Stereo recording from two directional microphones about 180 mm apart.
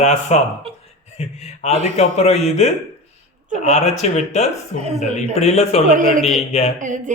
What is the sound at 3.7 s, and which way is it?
A man's voice, 40° left (ahead or behind).